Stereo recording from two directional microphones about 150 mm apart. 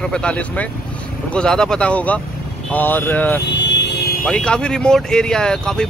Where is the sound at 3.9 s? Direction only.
90° left.